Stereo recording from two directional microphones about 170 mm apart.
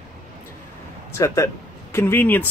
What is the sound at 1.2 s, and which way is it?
Speech, 20° left (ahead or behind).